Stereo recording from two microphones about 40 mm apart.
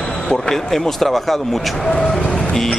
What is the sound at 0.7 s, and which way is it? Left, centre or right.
Speech, centre.